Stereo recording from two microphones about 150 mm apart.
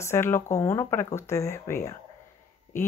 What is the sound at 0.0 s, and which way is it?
Speech, 15° left (ahead or behind).